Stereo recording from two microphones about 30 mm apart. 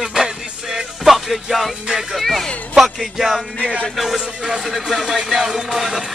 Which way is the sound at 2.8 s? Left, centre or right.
Centre.